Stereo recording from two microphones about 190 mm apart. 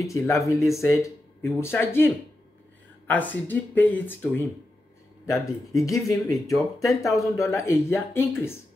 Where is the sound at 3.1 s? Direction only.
10° left (ahead or behind).